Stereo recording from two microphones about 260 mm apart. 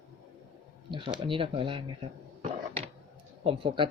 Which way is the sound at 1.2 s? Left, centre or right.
Centre.